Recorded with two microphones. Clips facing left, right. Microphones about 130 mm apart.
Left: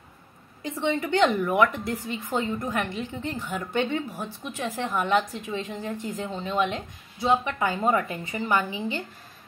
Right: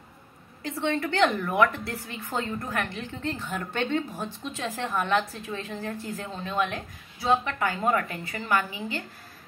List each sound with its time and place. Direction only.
0.6 s a woman's voice: 15° left (ahead or behind)